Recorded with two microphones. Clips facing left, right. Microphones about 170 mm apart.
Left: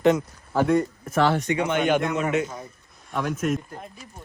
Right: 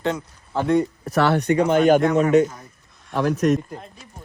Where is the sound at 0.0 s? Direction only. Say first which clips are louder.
Left 5 dB; 15° left (ahead or behind).